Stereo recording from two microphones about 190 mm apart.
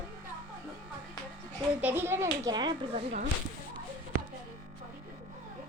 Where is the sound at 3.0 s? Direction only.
40° right (ahead or behind).